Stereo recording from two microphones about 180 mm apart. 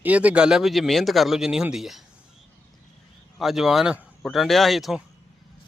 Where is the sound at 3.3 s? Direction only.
Centre (ahead or behind).